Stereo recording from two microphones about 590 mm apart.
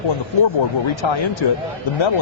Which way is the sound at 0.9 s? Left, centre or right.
Left.